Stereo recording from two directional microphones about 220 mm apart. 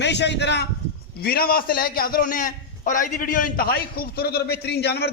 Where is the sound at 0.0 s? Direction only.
50° left (ahead or behind).